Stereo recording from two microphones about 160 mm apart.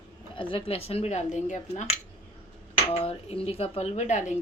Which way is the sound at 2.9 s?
40° left (ahead or behind).